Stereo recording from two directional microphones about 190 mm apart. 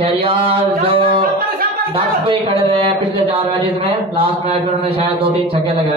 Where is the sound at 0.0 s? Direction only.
30° right (ahead or behind).